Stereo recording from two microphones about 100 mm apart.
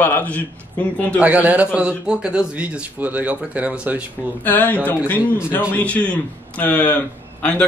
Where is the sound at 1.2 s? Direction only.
15° right (ahead or behind).